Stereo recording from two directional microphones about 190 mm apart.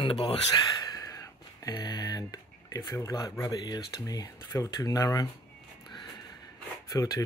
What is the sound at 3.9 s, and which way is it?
Speech, 20° left (ahead or behind).